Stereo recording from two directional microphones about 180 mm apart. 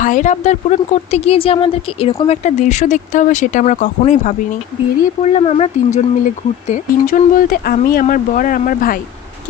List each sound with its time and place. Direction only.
0.0 s speech: 45° left (ahead or behind)